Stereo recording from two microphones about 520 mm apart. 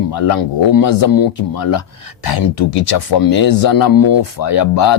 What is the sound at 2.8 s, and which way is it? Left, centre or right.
Speech, left.